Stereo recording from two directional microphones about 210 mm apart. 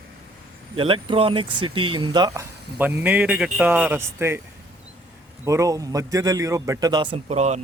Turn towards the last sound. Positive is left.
turn(degrees=-30)  # may be behind; listen again after turning